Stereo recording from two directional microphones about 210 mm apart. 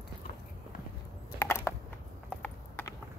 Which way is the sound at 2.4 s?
10° left (ahead or behind).